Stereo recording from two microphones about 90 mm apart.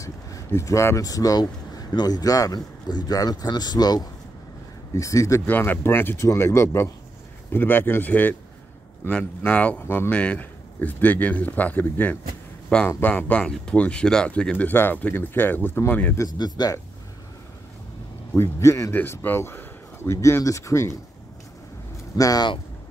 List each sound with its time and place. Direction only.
0.0 s speech: 35° left (ahead or behind); by 4.1 s 50° left (ahead or behind)
4.9 s speech: 35° left (ahead or behind)
5.5 s speech: 25° left (ahead or behind)
16.3 s speech: 50° left (ahead or behind)
18.3 s speech: 30° left (ahead or behind)
22.1 s speech: 45° left (ahead or behind)